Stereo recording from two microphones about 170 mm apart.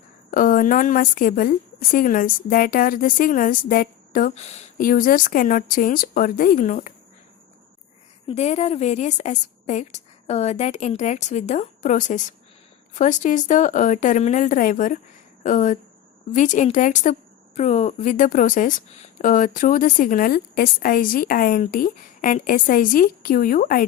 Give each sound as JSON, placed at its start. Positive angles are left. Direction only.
{"t": 0.3, "sound": "a woman's voice", "side_deg": 55}
{"t": 4.4, "sound": "speech", "side_deg": 40}
{"t": 4.8, "sound": "a woman's voice", "side_deg": 55}
{"t": 8.3, "sound": "a woman's voice", "side_deg": 40}